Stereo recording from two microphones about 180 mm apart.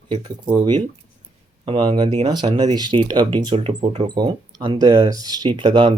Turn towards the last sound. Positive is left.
turn(degrees=-25)  # may be behind; listen again after turning